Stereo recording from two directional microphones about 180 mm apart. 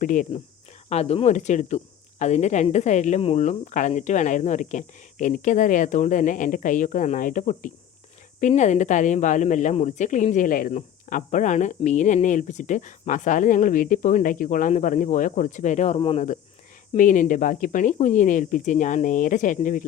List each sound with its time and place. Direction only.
0.0 s speech: 45° left (ahead or behind)